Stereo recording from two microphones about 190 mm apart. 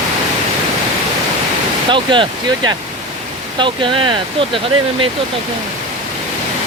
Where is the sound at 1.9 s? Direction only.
25° right (ahead or behind).